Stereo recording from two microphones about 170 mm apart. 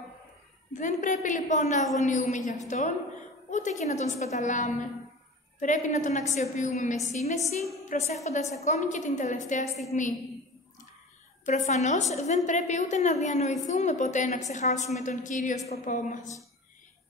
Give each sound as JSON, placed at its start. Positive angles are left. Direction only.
{"t": 0.7, "sound": "a woman's voice", "side_deg": 50}
{"t": 11.4, "sound": "a woman's voice", "side_deg": 45}